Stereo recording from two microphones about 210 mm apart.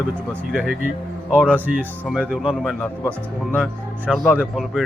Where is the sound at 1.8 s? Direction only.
5° right (ahead or behind).